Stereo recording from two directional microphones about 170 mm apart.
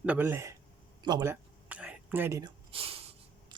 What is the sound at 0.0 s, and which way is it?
Speech, 10° right (ahead or behind).